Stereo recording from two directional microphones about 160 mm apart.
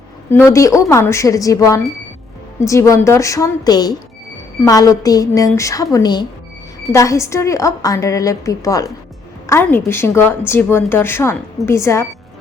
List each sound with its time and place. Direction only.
0.3 s a woman's voice: 15° left (ahead or behind)